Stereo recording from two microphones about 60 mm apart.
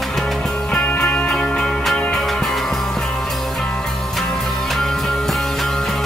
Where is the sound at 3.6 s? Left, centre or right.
Centre.